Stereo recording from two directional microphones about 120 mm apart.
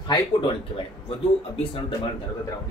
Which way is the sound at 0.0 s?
35° left (ahead or behind).